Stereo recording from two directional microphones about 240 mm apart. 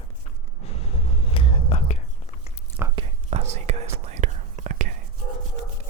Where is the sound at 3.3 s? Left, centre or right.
Right.